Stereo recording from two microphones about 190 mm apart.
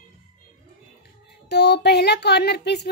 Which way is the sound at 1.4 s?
60° left (ahead or behind).